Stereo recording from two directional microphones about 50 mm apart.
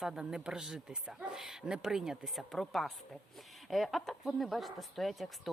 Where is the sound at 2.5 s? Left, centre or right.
Centre.